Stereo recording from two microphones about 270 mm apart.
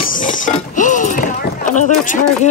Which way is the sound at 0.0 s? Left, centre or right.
Left.